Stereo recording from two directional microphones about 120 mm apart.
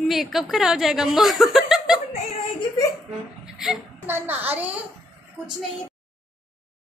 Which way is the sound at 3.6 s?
5° right (ahead or behind).